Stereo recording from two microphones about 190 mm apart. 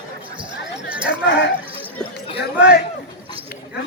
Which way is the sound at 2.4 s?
55° left (ahead or behind).